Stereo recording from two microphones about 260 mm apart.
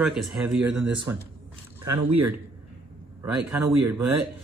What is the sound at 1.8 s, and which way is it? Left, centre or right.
Speech, right.